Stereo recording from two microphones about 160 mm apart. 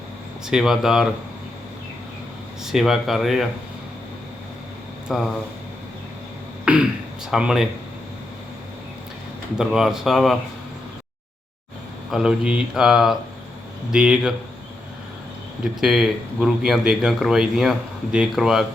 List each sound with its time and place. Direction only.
0.4 s speech: centre (ahead or behind)
2.6 s speech: centre (ahead or behind)
5.1 s speech: centre (ahead or behind)
6.7 s speech: 5° right (ahead or behind)
9.6 s speech: 5° right (ahead or behind)
12.1 s speech: 5° right (ahead or behind)
15.6 s speech: 5° right (ahead or behind)